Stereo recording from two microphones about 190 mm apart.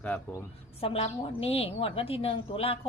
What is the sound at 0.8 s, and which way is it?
A woman's voice, 30° left (ahead or behind).